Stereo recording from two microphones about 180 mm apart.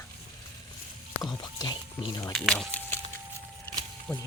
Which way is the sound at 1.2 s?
20° left (ahead or behind).